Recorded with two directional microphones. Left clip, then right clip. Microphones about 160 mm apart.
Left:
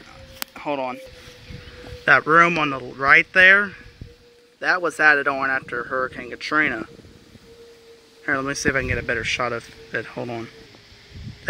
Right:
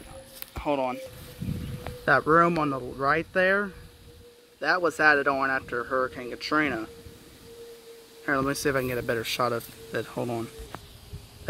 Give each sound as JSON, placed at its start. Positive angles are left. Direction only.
{"t": 0.7, "sound": "speech", "side_deg": -5}
{"t": 2.2, "sound": "a man's voice", "side_deg": 10}
{"t": 2.8, "sound": "speech", "side_deg": 20}
{"t": 3.1, "sound": "speech", "side_deg": 0}
{"t": 5.8, "sound": "a man's voice", "side_deg": 15}
{"t": 6.0, "sound": "speech", "side_deg": 0}
{"t": 8.3, "sound": "speech", "side_deg": 0}